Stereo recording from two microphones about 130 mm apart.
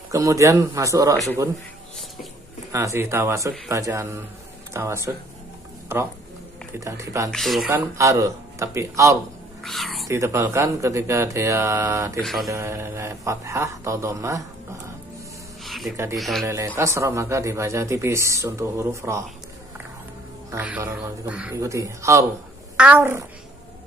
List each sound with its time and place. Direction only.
0.1 s a man's voice: 25° right (ahead or behind)
2.7 s a man's voice: 20° right (ahead or behind)
7.2 s speech: centre (ahead or behind)
7.7 s a man's voice: 20° right (ahead or behind)
9.6 s speech: centre (ahead or behind)
10.0 s a man's voice: 25° right (ahead or behind)
12.2 s speech: centre (ahead or behind)
12.4 s a man's voice: 20° right (ahead or behind)
15.6 s music: centre (ahead or behind)
16.2 s speech: centre (ahead or behind)
16.4 s a man's voice: 20° right (ahead or behind)
20.5 s speech: 15° right (ahead or behind)
21.5 s a man's voice: 25° right (ahead or behind)